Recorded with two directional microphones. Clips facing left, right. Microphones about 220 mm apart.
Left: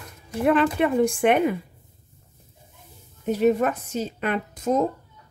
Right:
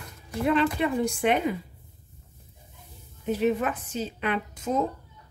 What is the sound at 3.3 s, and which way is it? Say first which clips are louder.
A woman's voice: left 5 dB; 40° left (ahead or behind).